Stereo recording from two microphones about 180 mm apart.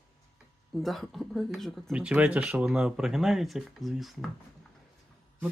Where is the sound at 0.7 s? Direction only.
Centre (ahead or behind).